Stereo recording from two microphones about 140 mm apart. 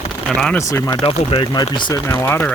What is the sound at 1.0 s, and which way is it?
Speech, 35° left (ahead or behind).